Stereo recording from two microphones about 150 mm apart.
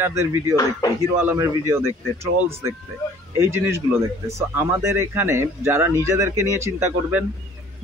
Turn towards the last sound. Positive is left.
turn(degrees=-15)  # may be behind; listen again after turning